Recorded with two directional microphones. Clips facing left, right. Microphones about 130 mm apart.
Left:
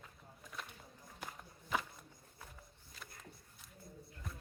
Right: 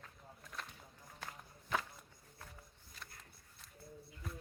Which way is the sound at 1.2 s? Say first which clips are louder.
Left 1 dB; 5° left (ahead or behind).